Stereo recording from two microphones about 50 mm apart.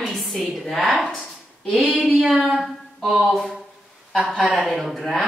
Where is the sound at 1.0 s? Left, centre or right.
Centre.